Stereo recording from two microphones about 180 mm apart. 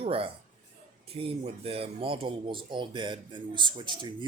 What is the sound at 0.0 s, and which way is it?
Speech, 30° right (ahead or behind).